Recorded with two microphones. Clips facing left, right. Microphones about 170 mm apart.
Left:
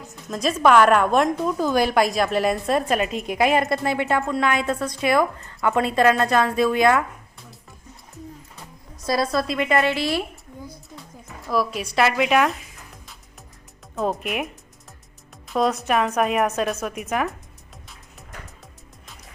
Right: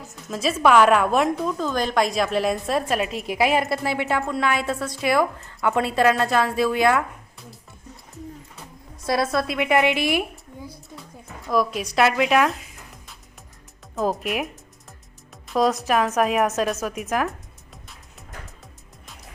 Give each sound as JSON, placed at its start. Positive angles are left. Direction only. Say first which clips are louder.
{"t": 0.0, "sound": "a woman's voice", "louder": "left 1 dB", "side_deg": 0}
{"t": 9.0, "sound": "a woman's voice", "louder": "even", "side_deg": -5}
{"t": 9.6, "sound": "a woman's voice", "louder": "right 4 dB", "side_deg": -15}
{"t": 11.4, "sound": "a woman's voice", "louder": "right 1 dB", "side_deg": 5}
{"t": 13.9, "sound": "a woman's voice", "louder": "right 1 dB", "side_deg": 0}